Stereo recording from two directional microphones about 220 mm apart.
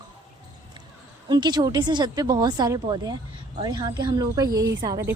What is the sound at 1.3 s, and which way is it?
A woman's voice, 20° right (ahead or behind).